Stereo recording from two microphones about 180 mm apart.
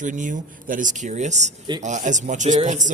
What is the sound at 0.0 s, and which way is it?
Speech, 45° right (ahead or behind).